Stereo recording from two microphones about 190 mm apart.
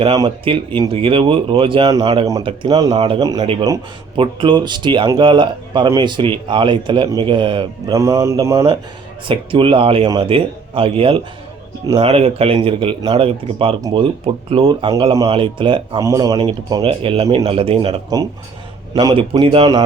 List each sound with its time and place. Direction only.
0.2 s speech: 30° right (ahead or behind)
2.9 s speech: 35° right (ahead or behind)
3.2 s speech: 20° right (ahead or behind)
9.2 s speech: 25° right (ahead or behind)